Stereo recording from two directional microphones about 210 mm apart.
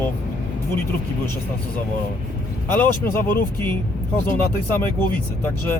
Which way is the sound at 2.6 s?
10° left (ahead or behind).